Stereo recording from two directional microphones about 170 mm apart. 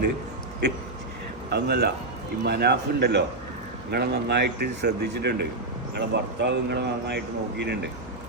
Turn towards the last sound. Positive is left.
turn(degrees=-85)